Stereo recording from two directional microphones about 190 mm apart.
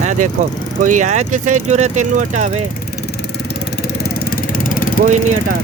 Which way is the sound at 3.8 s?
55° left (ahead or behind).